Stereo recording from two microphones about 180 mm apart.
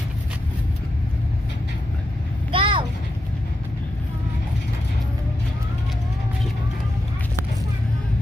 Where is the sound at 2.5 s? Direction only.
30° right (ahead or behind).